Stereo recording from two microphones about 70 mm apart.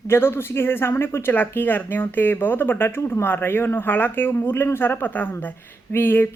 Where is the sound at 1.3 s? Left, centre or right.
Left.